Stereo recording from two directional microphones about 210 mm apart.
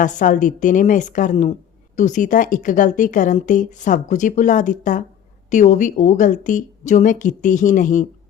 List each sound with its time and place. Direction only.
0.0 s a woman's voice: 40° left (ahead or behind)